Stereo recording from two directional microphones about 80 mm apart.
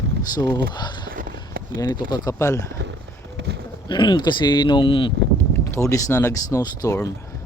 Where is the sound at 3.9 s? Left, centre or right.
Left.